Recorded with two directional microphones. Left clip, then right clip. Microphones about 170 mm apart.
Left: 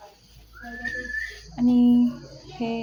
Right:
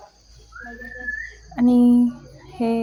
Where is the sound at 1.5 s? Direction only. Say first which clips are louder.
Right 4 dB; 30° right (ahead or behind).